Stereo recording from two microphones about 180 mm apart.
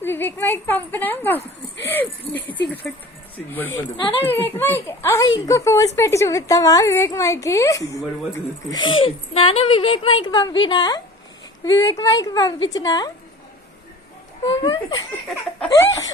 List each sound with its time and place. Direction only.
0.0 s a woman's voice: 10° left (ahead or behind)
3.9 s a woman's voice: 25° left (ahead or behind)
4.2 s a woman's voice: 10° left (ahead or behind)
14.4 s a woman's voice: 25° left (ahead or behind)